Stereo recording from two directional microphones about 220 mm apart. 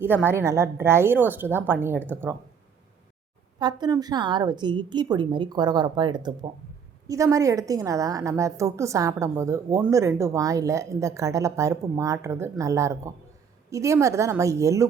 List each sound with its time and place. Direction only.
0.0 s a woman's voice: 10° right (ahead or behind)
3.6 s a woman's voice: 20° right (ahead or behind)